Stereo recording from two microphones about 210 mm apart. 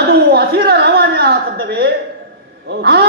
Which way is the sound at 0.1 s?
50° right (ahead or behind).